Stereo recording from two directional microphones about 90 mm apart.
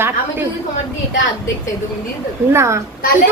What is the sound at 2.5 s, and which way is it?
Speech, 30° right (ahead or behind).